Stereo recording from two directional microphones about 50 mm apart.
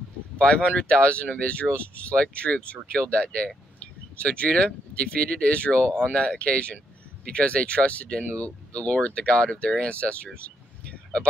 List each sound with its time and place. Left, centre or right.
0.4 s speech: left